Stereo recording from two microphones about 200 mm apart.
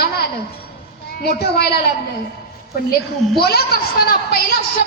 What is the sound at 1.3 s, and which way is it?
Speech, 50° left (ahead or behind).